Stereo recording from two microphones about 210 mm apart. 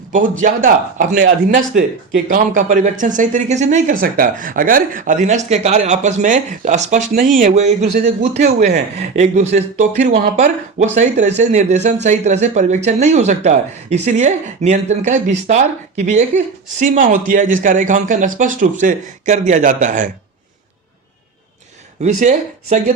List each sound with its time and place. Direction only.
0.4 s speech: 40° right (ahead or behind)
22.0 s speech: 35° right (ahead or behind)